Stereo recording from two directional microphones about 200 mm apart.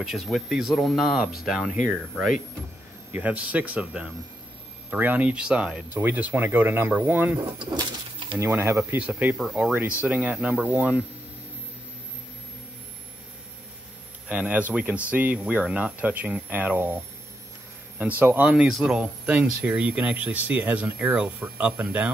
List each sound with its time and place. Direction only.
0.0 s speech: centre (ahead or behind)
7.7 s speech: 25° right (ahead or behind)
8.4 s speech: 10° right (ahead or behind)
14.2 s speech: 5° right (ahead or behind)
18.2 s speech: 10° right (ahead or behind)